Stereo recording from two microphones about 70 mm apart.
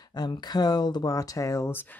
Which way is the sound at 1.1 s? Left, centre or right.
Left.